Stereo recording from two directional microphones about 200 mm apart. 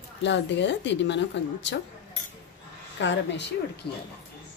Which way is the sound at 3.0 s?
65° left (ahead or behind).